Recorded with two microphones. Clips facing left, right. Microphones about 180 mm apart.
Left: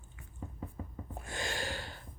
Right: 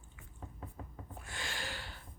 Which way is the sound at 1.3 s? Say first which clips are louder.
Left 6 dB; 45° left (ahead or behind).